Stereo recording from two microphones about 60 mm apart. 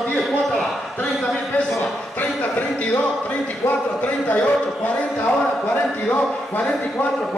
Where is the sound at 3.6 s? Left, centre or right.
Left.